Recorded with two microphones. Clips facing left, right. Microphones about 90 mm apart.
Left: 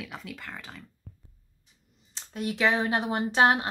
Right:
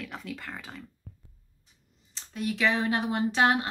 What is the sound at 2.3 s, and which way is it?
Speech, 35° left (ahead or behind).